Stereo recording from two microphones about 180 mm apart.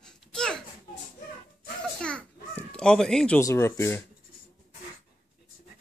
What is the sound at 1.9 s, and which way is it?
Children playing, 5° left (ahead or behind).